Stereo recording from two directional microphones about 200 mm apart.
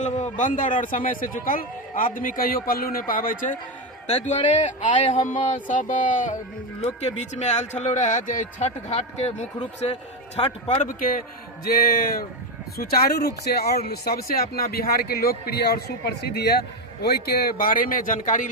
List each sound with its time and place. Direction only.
0.0 s speech: 35° left (ahead or behind)
10.8 s speech: 45° left (ahead or behind)